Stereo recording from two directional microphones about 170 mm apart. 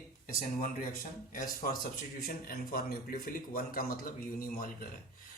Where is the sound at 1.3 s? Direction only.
55° left (ahead or behind).